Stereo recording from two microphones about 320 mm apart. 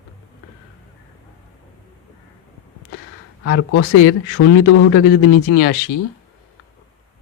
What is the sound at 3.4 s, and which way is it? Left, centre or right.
Speech, left.